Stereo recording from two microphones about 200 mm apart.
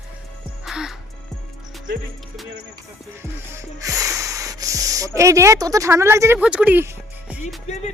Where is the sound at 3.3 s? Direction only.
15° right (ahead or behind).